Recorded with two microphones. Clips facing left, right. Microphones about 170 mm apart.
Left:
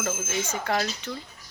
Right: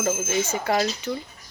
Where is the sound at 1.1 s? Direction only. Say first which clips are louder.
Right 6 dB; 20° right (ahead or behind).